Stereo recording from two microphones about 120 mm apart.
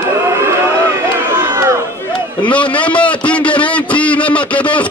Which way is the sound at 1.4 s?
25° right (ahead or behind).